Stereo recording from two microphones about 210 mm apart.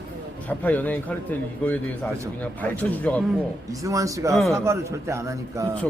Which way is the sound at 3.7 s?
15° right (ahead or behind).